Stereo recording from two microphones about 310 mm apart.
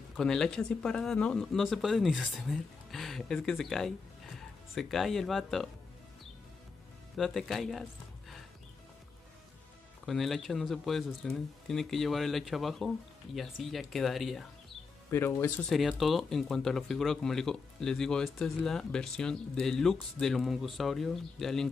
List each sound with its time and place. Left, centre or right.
0.2 s speech: centre
7.2 s speech: centre
10.0 s speech: centre